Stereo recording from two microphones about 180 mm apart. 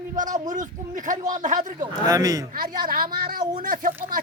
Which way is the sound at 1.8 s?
20° right (ahead or behind).